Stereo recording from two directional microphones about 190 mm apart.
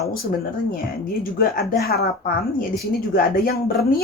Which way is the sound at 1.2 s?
50° left (ahead or behind).